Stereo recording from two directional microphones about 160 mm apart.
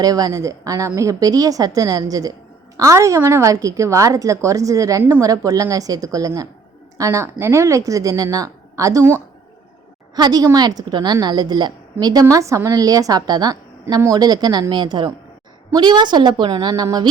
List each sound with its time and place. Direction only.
0.0 s a woman's voice: 25° right (ahead or behind)
10.2 s a woman's voice: 25° right (ahead or behind)